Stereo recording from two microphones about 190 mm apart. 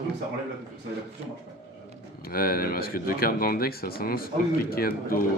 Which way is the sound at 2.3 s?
50° left (ahead or behind).